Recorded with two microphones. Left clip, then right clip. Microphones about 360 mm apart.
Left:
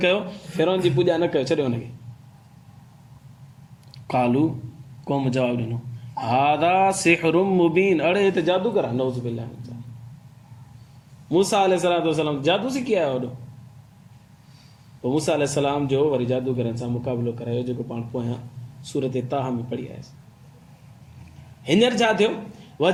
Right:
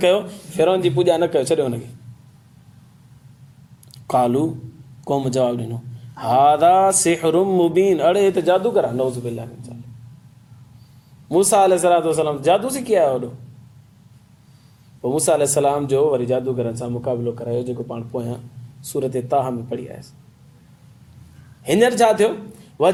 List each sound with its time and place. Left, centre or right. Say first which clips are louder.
0.0 s speech: right 4 dB; right
4.0 s speech: right 3 dB; centre
11.3 s speech: right 5 dB; right
15.0 s speech: right 5 dB; right
18.9 s speech: right 4 dB; right
21.6 s speech: right 4 dB; right